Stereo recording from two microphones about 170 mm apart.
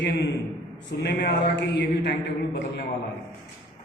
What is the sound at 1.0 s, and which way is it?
Speech, 75° left (ahead or behind).